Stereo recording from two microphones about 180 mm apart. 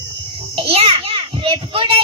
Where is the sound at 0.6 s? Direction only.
35° right (ahead or behind).